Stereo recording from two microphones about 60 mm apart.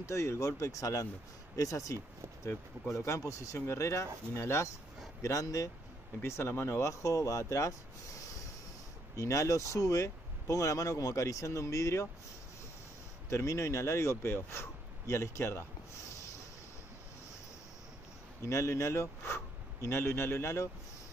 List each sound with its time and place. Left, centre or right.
0.0 s speech: left
2.9 s speech: left
4.4 s speech: left
5.2 s speech: left
6.2 s speech: left
9.1 s speech: left
13.3 s speech: left
18.4 s speech: left